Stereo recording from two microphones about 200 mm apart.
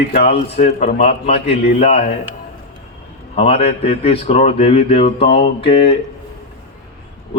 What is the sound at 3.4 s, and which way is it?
Speech, 30° left (ahead or behind).